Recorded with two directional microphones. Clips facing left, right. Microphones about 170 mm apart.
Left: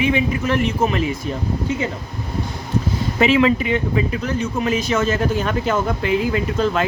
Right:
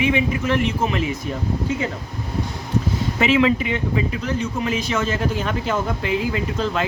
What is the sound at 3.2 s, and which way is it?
Speech, 40° left (ahead or behind).